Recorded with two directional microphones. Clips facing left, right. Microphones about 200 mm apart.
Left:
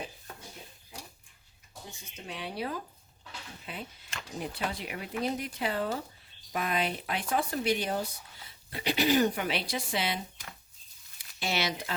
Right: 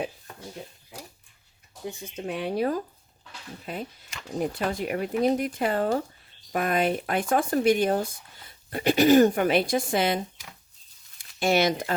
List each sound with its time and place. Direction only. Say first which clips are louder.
2.1 s speech: right 9 dB; 55° right (ahead or behind)
11.3 s speech: right 10 dB; 50° right (ahead or behind)